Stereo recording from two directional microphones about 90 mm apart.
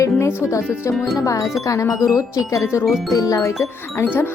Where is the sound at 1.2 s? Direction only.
40° left (ahead or behind).